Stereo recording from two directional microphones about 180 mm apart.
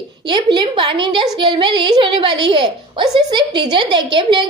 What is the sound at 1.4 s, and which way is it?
A woman's voice, 25° right (ahead or behind).